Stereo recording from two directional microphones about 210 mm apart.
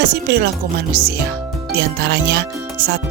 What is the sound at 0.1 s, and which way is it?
Speech, 50° right (ahead or behind).